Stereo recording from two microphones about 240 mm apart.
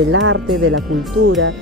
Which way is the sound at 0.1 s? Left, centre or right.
Right.